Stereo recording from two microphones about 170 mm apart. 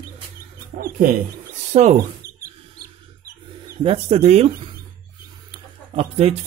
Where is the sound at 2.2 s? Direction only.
60° right (ahead or behind).